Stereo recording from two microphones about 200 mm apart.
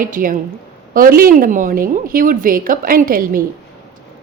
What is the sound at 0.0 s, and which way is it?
Speech, 45° right (ahead or behind).